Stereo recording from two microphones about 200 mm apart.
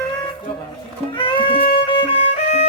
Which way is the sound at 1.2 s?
25° left (ahead or behind).